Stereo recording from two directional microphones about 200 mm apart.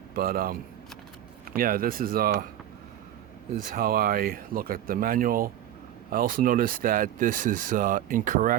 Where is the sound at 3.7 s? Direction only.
45° right (ahead or behind).